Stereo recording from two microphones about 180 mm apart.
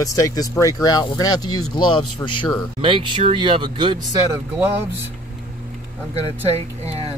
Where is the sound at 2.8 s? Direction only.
30° right (ahead or behind).